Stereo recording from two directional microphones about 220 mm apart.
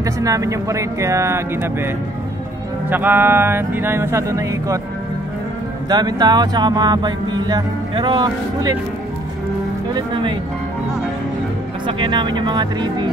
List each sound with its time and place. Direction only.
0.0 s speech: 15° right (ahead or behind)
2.9 s speech: 10° right (ahead or behind)
5.9 s speech: 20° right (ahead or behind)
12.0 s speech: 20° right (ahead or behind)